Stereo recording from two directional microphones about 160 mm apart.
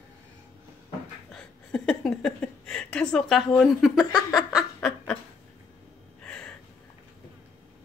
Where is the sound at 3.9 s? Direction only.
25° left (ahead or behind).